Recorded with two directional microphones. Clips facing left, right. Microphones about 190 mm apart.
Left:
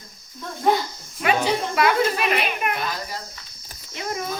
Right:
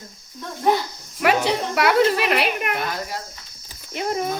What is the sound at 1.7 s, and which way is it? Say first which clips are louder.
A child's voice: right 5 dB; 70° right (ahead or behind).